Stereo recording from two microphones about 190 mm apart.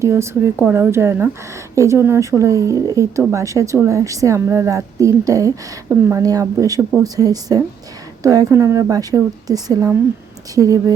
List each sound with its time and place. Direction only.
0.0 s a woman's voice: 15° right (ahead or behind)